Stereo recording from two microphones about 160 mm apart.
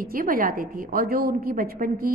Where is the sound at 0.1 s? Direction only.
60° right (ahead or behind).